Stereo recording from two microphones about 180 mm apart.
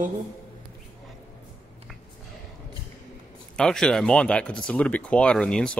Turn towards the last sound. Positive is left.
turn(degrees=5)  # may be behind; listen again after turning